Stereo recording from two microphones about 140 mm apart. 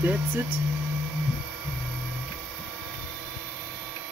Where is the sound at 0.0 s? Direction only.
15° right (ahead or behind).